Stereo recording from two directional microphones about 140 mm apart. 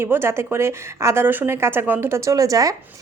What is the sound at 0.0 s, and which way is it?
A woman's voice, 15° right (ahead or behind).